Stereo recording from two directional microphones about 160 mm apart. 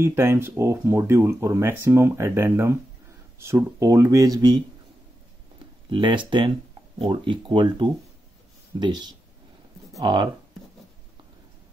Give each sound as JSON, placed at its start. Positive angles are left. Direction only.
{"t": 0.0, "sound": "speech", "side_deg": -15}
{"t": 5.9, "sound": "speech", "side_deg": -30}